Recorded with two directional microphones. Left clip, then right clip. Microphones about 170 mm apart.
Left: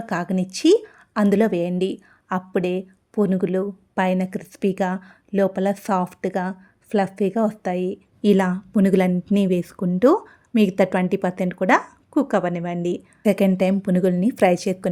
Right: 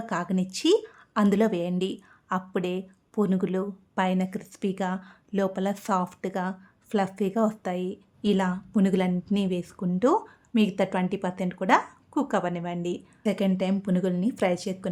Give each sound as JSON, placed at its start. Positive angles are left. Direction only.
{"t": 0.0, "sound": "speech", "side_deg": 20}